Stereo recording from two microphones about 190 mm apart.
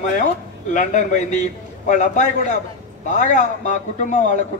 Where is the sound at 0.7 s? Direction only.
40° left (ahead or behind).